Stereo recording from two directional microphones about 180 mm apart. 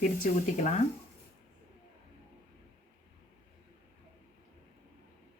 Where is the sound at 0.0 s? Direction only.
40° left (ahead or behind).